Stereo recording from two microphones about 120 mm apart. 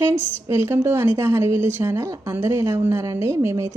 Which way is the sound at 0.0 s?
20° right (ahead or behind).